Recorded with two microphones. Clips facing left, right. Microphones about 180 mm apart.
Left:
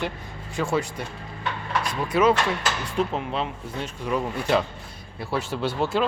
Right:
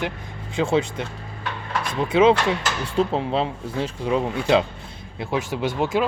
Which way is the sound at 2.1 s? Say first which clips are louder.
Right 4 dB; 25° right (ahead or behind).